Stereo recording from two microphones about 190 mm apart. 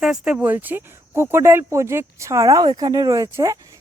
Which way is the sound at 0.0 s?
5° right (ahead or behind).